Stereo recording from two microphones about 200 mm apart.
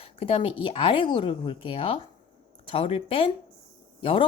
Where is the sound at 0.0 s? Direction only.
30° left (ahead or behind).